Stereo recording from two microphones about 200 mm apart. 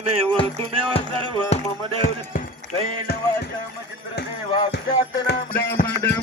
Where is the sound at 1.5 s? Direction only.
30° left (ahead or behind).